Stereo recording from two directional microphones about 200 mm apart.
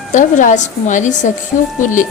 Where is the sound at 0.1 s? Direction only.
40° left (ahead or behind).